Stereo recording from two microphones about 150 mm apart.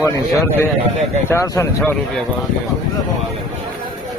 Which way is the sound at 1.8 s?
5° left (ahead or behind).